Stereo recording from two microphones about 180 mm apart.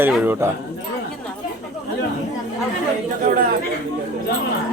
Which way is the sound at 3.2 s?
50° right (ahead or behind).